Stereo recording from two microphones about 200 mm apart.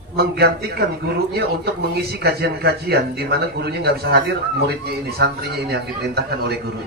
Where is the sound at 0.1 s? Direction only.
50° right (ahead or behind).